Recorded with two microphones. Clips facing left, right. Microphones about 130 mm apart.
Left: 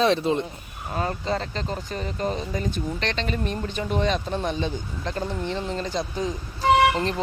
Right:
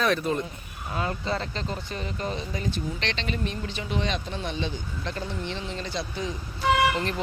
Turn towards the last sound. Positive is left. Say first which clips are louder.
# left 4 dB
turn(degrees=35)  # may be behind; listen again after turning